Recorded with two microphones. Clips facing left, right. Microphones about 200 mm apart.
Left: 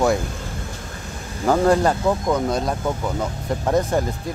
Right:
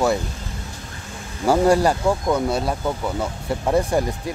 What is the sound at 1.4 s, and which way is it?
Speech, 10° right (ahead or behind).